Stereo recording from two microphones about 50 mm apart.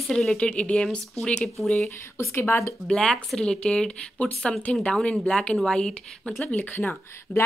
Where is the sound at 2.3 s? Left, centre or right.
Left.